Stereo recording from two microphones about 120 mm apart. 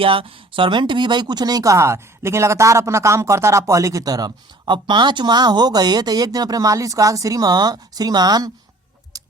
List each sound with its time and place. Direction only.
0.0 s speech: 50° right (ahead or behind); by 8.5 s 30° right (ahead or behind)
9.1 s chicken: 30° right (ahead or behind)